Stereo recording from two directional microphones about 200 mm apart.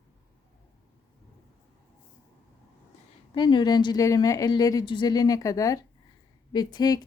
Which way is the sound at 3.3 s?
20° left (ahead or behind).